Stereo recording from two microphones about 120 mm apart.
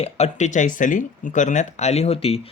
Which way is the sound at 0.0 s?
75° left (ahead or behind).